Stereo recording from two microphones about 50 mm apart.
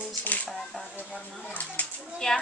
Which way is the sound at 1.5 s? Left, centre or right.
Left.